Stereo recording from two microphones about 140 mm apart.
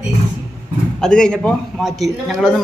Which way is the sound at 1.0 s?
5° left (ahead or behind).